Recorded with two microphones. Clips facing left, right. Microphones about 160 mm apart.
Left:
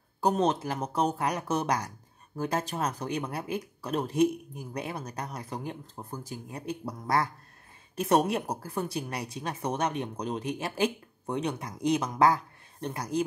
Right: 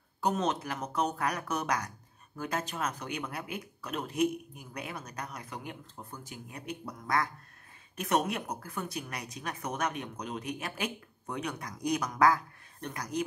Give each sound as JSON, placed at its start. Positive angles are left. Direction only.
{"t": 0.2, "sound": "speech", "side_deg": 35}